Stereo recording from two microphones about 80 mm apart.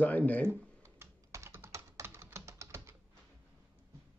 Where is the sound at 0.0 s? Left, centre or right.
Left.